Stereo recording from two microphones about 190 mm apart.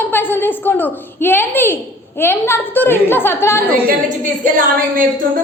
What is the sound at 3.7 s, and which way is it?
A woman's voice, 45° right (ahead or behind).